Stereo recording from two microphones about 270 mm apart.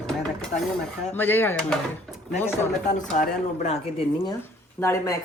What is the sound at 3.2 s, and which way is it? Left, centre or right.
Speech, left.